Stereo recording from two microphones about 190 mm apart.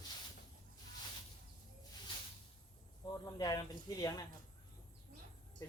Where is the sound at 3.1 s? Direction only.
20° left (ahead or behind).